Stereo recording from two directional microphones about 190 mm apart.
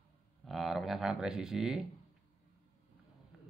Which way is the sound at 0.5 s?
Centre (ahead or behind).